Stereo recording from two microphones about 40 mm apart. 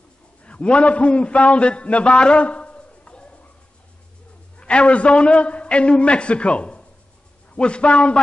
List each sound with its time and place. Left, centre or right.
0.4 s a man's voice: left
4.6 s a man's voice: left